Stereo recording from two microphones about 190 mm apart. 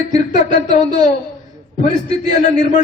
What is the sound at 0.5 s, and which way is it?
A man's voice, 35° left (ahead or behind).